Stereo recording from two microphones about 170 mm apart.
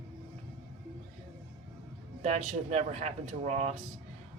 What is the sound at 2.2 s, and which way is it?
Speech, 45° right (ahead or behind).